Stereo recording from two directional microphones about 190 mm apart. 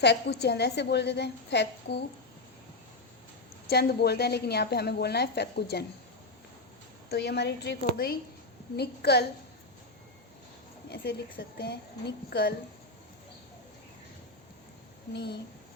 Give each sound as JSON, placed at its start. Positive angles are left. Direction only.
{"t": 0.0, "sound": "a woman's voice", "side_deg": 60}
{"t": 3.7, "sound": "a woman's voice", "side_deg": 60}
{"t": 7.1, "sound": "a woman's voice", "side_deg": 60}
{"t": 10.8, "sound": "a woman's voice", "side_deg": 60}
{"t": 15.1, "sound": "a woman's voice", "side_deg": 60}